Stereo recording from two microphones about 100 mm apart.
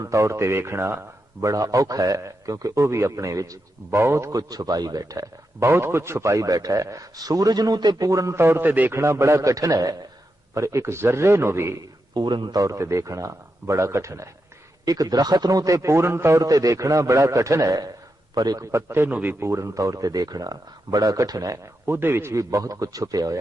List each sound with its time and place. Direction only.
0.0 s a man's voice: 30° right (ahead or behind)
12.1 s a man's voice: 50° right (ahead or behind)
21.8 s a man's voice: 20° right (ahead or behind)